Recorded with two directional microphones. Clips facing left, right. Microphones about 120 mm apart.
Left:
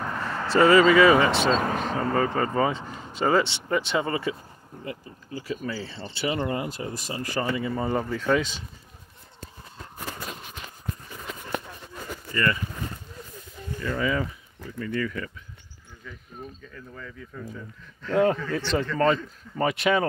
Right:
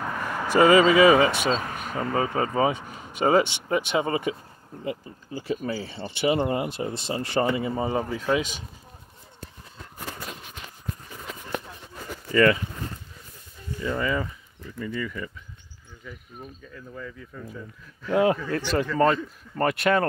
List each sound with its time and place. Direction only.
0.1 s speech: 10° right (ahead or behind)
1.6 s speech: 45° left (ahead or behind)
2.1 s speech: 15° right (ahead or behind)
8.0 s speech: 10° right (ahead or behind)
13.9 s speech: centre (ahead or behind)
16.6 s speech: 5° right (ahead or behind)